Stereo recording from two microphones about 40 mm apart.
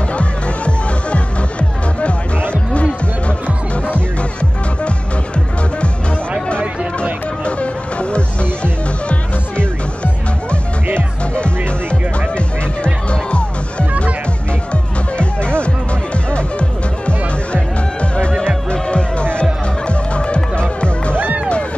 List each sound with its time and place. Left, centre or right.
0.1 s music: left
7.4 s music: left
11.3 s music: left
18.7 s music: left